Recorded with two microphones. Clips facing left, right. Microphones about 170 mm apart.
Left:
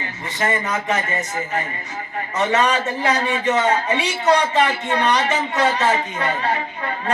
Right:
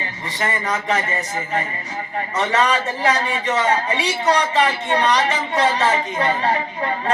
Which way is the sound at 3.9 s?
35° right (ahead or behind).